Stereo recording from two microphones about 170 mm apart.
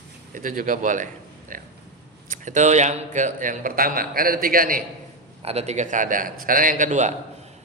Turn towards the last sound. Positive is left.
turn(degrees=-45)  # may be behind; listen again after turning